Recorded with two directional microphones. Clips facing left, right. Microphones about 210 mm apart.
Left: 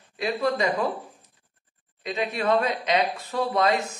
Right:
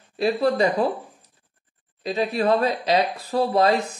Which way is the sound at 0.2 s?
35° right (ahead or behind).